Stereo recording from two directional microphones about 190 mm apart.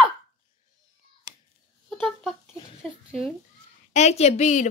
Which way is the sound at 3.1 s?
Centre (ahead or behind).